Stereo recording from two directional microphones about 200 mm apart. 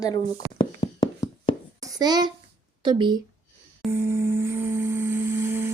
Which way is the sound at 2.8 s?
25° right (ahead or behind).